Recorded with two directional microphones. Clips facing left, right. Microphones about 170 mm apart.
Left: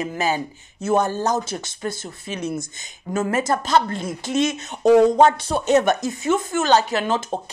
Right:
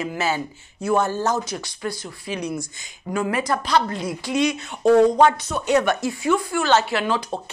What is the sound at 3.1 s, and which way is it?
A woman's voice, 40° left (ahead or behind).